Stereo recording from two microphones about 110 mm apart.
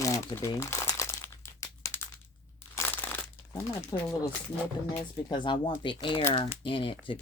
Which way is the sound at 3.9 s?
40° left (ahead or behind).